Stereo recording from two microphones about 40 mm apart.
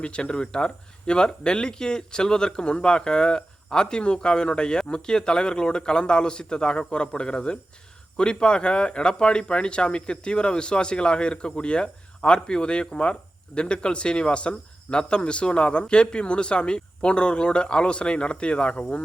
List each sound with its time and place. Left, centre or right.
0.0 s speech: left